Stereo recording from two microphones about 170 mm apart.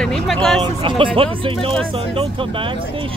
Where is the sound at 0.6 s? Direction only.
30° right (ahead or behind).